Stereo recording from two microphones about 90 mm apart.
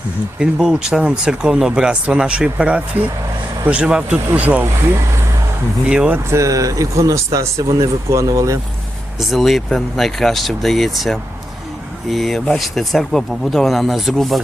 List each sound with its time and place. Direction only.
0.3 s speech: 5° right (ahead or behind)
5.9 s speech: 10° right (ahead or behind)
6.3 s speech: 35° right (ahead or behind)
9.3 s speech: centre (ahead or behind)